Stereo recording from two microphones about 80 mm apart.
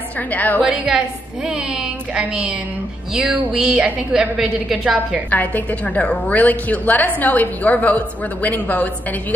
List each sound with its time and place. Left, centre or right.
0.3 s a woman's voice: left
0.6 s a woman's voice: centre
2.1 s a woman's voice: centre
5.3 s a woman's voice: centre